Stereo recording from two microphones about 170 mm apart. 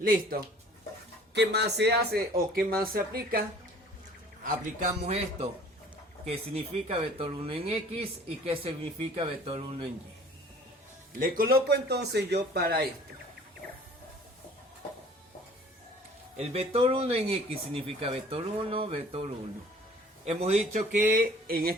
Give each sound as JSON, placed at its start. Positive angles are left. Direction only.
{"t": 0.0, "sound": "speech", "side_deg": -55}
{"t": 1.3, "sound": "speech", "side_deg": -80}
{"t": 2.6, "sound": "speech", "side_deg": -60}
{"t": 4.4, "sound": "a man's voice", "side_deg": -50}
{"t": 11.2, "sound": "speech", "side_deg": -60}
{"t": 16.4, "sound": "speech", "side_deg": -40}
{"t": 21.1, "sound": "speech", "side_deg": -60}